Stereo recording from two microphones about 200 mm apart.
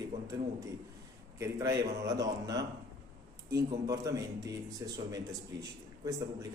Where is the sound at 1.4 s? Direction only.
15° right (ahead or behind).